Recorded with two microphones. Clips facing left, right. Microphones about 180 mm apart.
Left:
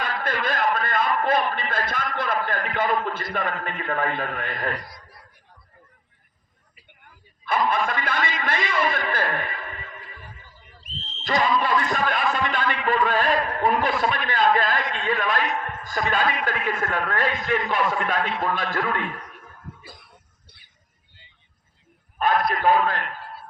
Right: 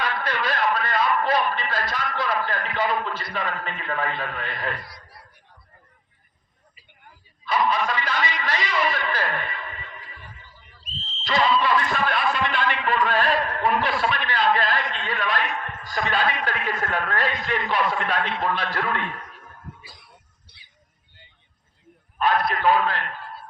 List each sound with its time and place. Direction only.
0.0 s a man's voice: 50° left (ahead or behind)
7.4 s a man's voice: 50° left (ahead or behind)
11.6 s a man's voice: 45° left (ahead or behind)
19.8 s a sound: 55° left (ahead or behind)
20.5 s music: 50° left (ahead or behind)
22.2 s a man's voice: 45° left (ahead or behind)